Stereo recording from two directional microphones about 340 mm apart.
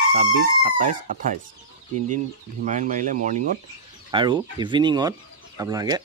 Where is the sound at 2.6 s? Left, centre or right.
Right.